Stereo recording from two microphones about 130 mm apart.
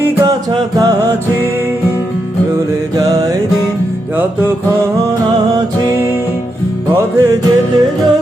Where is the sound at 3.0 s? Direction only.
25° right (ahead or behind).